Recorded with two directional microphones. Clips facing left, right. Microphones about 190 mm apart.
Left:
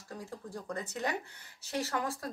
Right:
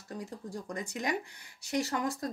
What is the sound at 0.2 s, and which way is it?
Speech, 15° right (ahead or behind).